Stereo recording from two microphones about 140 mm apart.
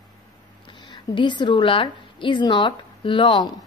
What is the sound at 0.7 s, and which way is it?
A woman's voice, 35° left (ahead or behind).